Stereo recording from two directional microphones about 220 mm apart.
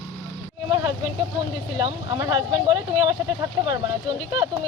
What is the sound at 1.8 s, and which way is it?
Speech, 20° right (ahead or behind).